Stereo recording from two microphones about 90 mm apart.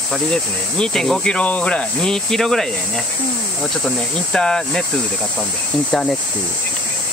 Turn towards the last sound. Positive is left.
turn(degrees=10)  # may be behind; listen again after turning